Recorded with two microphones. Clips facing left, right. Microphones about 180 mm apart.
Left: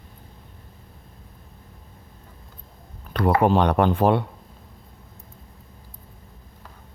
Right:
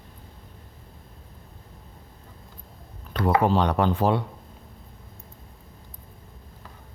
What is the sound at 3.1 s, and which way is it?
Speech, 60° left (ahead or behind).